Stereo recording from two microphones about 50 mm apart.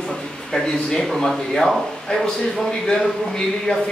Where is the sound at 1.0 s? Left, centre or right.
Centre.